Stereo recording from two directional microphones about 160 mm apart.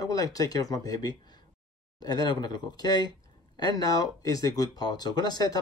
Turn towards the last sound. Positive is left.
turn(degrees=25)  # may be behind; listen again after turning